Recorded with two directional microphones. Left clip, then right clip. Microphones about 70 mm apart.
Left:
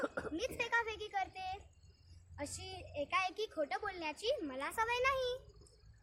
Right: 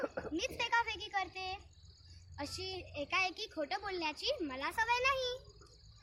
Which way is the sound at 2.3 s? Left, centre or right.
Left.